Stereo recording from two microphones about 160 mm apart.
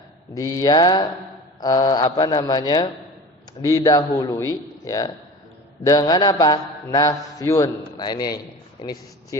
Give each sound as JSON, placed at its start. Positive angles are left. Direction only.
{"t": 0.3, "sound": "a man's voice", "side_deg": 25}